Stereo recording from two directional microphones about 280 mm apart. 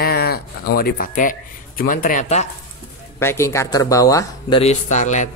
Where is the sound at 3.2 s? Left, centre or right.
Centre.